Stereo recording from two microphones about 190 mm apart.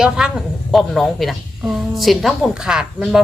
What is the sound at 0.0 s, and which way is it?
A woman's voice, 5° right (ahead or behind).